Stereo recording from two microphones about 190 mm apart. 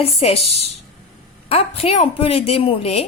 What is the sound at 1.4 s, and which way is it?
A woman's voice, 30° left (ahead or behind).